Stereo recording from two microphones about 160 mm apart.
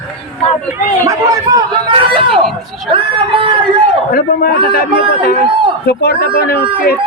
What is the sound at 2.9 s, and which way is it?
Speech, 35° right (ahead or behind).